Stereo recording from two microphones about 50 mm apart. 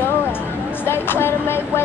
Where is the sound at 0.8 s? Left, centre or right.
Left.